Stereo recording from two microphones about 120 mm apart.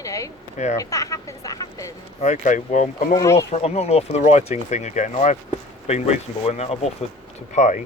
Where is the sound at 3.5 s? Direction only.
60° left (ahead or behind).